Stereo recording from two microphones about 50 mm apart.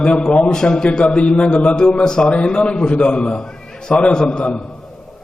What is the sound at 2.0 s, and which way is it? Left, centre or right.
Speech, centre.